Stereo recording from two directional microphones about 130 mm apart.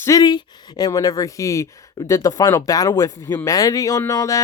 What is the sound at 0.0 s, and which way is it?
Speech, 30° left (ahead or behind).